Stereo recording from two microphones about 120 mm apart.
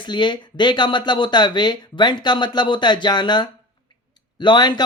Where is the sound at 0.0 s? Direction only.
40° left (ahead or behind).